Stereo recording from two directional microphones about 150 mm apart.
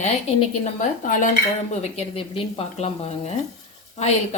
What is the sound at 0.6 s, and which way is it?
Speech, 60° left (ahead or behind).